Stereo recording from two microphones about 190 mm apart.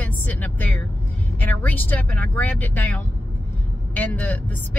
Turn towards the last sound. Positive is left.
turn(degrees=5)  # may be behind; listen again after turning